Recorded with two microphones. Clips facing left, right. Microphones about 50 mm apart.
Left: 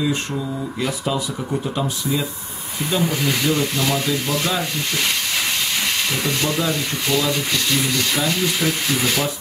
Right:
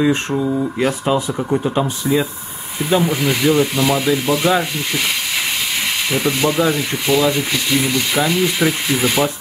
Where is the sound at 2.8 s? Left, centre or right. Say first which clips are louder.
Right 5 dB; centre.